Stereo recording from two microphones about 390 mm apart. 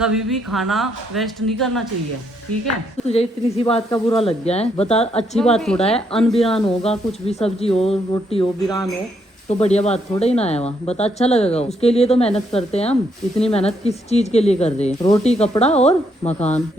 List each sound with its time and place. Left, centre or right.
0.0 s speech: centre
3.1 s speech: centre
5.5 s speech: centre
5.8 s speech: centre
6.1 s speech: centre
6.4 s speech: centre